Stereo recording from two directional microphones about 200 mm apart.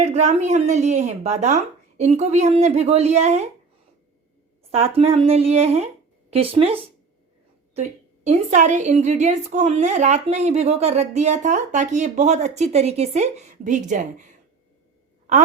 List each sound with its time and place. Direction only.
0.0 s a woman's voice: 35° right (ahead or behind)
4.7 s speech: 30° right (ahead or behind)
7.8 s a woman's voice: 35° right (ahead or behind)